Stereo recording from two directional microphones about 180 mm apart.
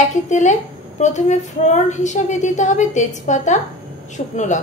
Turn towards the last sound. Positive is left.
turn(degrees=40)  # may be behind; listen again after turning